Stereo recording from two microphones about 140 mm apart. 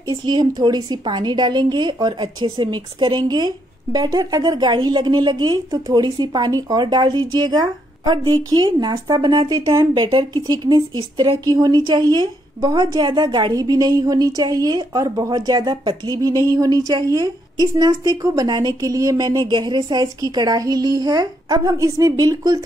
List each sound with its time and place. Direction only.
0.1 s a woman's voice: 30° right (ahead or behind)